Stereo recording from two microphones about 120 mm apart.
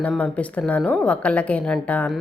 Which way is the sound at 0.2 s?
10° left (ahead or behind).